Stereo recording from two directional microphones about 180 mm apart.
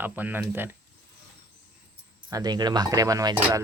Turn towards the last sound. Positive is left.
turn(degrees=-20)  # may be behind; listen again after turning